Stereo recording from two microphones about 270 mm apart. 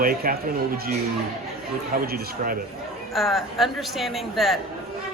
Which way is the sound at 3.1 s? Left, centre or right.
Centre.